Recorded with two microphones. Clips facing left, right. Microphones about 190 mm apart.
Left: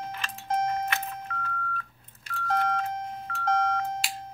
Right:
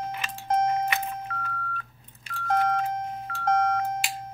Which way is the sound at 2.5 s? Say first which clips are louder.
Right 3 dB; 50° right (ahead or behind).